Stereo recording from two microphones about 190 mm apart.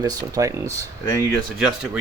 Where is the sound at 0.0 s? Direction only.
20° right (ahead or behind).